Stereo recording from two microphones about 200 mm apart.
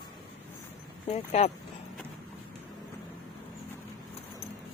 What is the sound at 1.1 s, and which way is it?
Speech, 35° left (ahead or behind).